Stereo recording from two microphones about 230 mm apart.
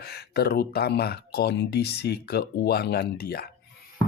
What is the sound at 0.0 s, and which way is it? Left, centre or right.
Speech, left.